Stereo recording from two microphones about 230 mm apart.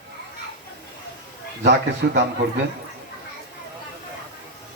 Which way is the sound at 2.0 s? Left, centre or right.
Right.